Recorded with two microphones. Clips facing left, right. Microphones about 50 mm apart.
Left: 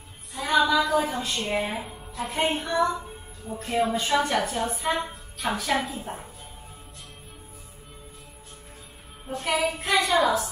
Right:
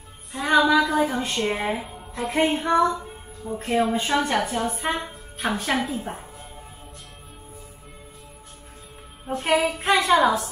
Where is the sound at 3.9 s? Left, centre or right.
Right.